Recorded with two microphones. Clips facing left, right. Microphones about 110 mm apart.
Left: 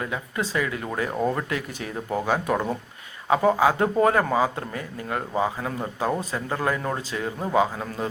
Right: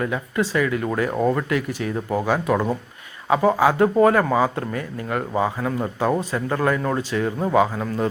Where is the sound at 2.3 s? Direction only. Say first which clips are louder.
Right 3 dB; 45° right (ahead or behind).